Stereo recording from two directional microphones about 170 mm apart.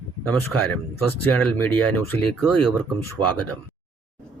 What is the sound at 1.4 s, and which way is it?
Speech, 10° left (ahead or behind).